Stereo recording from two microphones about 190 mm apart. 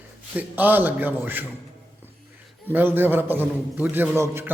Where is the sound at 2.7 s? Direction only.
10° right (ahead or behind).